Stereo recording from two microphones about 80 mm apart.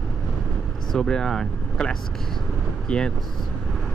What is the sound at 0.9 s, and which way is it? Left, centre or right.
Speech, centre.